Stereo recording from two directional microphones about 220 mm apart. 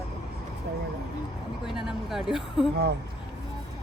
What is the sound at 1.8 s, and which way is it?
Speech, centre (ahead or behind).